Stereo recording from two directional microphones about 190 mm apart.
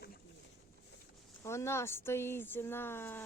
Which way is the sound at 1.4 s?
15° left (ahead or behind).